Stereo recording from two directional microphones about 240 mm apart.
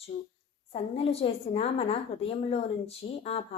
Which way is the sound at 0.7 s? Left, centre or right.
Left.